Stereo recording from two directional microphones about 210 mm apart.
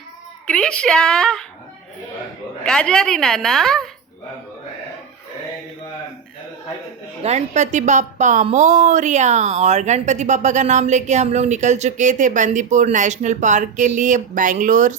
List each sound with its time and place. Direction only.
0.4 s a woman's voice: 5° left (ahead or behind)
2.6 s a woman's voice: 5° left (ahead or behind)
7.2 s a woman's voice: 30° right (ahead or behind)